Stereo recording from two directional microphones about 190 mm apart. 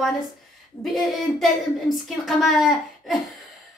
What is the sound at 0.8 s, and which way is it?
A woman's voice, centre (ahead or behind).